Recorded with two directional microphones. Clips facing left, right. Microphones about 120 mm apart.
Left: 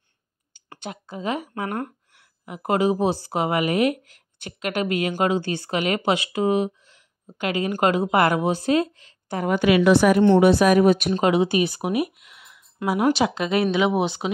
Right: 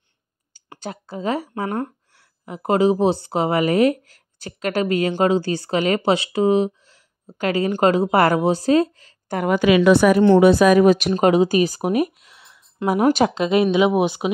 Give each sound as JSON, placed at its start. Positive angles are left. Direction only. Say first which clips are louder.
{"t": 0.7, "sound": "a woman's voice", "louder": "right 3 dB", "side_deg": -35}
{"t": 9.4, "sound": "a woman's voice", "louder": "right 3 dB", "side_deg": -90}
{"t": 11.1, "sound": "a woman's voice", "louder": "right 4 dB", "side_deg": -40}
{"t": 12.3, "sound": "a sound", "louder": "even", "side_deg": -30}
{"t": 12.8, "sound": "speech", "louder": "right 3 dB", "side_deg": -45}
{"t": 13.3, "sound": "speech", "louder": "right 4 dB", "side_deg": -20}